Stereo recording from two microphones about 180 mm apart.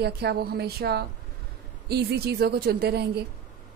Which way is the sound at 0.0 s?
65° right (ahead or behind).